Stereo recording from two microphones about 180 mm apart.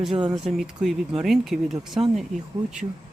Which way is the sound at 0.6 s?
Centre (ahead or behind).